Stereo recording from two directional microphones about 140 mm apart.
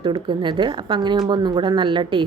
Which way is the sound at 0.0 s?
35° right (ahead or behind).